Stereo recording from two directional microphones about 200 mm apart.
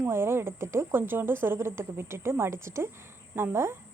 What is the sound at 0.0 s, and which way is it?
Speech, 10° right (ahead or behind).